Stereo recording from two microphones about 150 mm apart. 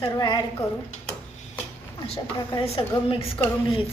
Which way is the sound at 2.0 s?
40° left (ahead or behind).